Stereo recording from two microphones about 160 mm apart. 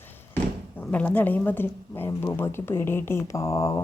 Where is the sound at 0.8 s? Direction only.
10° left (ahead or behind).